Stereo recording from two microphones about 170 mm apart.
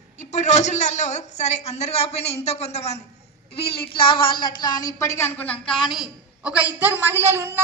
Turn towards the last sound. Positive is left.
turn(degrees=-15)  # may be behind; listen again after turning